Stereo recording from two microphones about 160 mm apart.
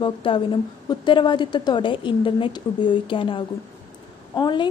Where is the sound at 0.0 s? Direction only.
30° left (ahead or behind).